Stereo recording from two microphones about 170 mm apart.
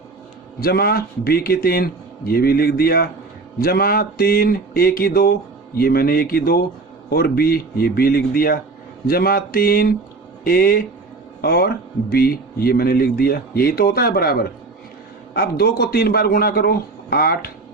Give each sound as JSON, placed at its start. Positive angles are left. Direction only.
{"t": 0.6, "sound": "a man's voice", "side_deg": 65}